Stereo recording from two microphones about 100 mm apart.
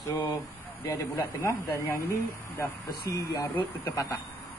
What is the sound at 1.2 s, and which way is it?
Speech, 20° left (ahead or behind).